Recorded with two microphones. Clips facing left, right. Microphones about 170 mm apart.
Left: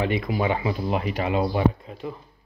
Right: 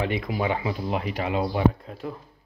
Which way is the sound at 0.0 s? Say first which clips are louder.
Left 2 dB; 15° left (ahead or behind).